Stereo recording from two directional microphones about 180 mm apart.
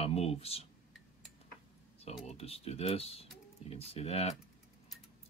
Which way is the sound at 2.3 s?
35° left (ahead or behind).